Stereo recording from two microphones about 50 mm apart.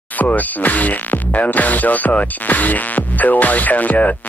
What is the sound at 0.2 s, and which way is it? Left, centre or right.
Speech, left.